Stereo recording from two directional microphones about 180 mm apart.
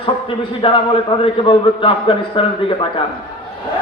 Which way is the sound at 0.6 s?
30° left (ahead or behind).